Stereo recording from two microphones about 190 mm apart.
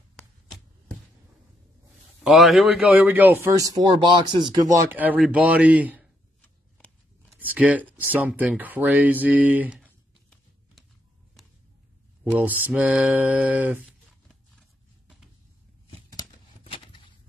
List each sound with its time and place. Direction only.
2.2 s a man's voice: centre (ahead or behind)
7.3 s a man's voice: 10° right (ahead or behind)
12.3 s a man's voice: 10° right (ahead or behind)
16.1 s a sound: 25° left (ahead or behind)